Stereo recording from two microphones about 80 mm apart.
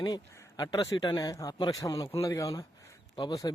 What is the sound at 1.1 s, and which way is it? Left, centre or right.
Speech, left.